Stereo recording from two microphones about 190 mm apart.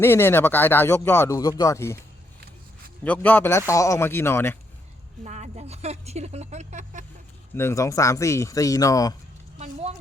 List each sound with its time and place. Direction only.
0.0 s speech: 10° left (ahead or behind)
3.0 s speech: 10° left (ahead or behind)
5.2 s speech: 35° right (ahead or behind)
7.5 s speech: 15° left (ahead or behind)